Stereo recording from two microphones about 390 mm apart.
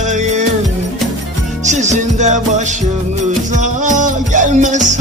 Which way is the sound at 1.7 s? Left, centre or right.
Centre.